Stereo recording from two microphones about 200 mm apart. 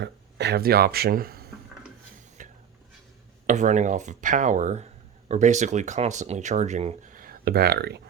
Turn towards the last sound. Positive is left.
turn(degrees=-55)  # may be behind; listen again after turning